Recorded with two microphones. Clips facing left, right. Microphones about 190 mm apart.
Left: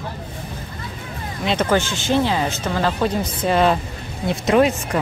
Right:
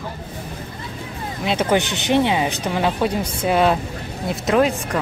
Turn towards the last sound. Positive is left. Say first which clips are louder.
# left 1 dB
turn(degrees=0)  # may be behind; listen again after turning